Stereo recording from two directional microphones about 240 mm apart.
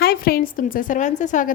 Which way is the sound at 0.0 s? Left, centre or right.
Left.